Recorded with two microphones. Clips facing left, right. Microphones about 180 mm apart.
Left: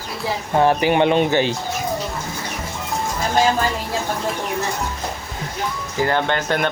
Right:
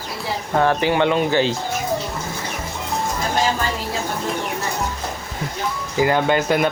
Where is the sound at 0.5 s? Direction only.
15° left (ahead or behind).